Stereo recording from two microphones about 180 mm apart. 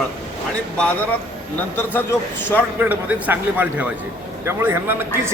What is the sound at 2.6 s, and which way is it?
A man's voice, 10° right (ahead or behind).